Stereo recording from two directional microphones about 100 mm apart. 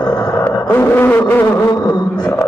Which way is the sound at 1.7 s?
40° left (ahead or behind).